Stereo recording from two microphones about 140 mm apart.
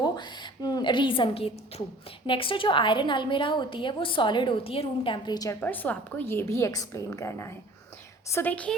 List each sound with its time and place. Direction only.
0.0 s a woman's voice: 30° left (ahead or behind)
5.5 s a woman's voice: 10° left (ahead or behind)